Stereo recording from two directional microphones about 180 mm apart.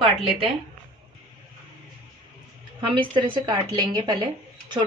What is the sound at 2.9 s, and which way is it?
A woman's voice, 25° right (ahead or behind).